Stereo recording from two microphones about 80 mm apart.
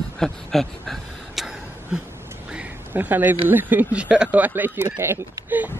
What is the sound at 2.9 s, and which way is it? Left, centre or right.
Speech, right.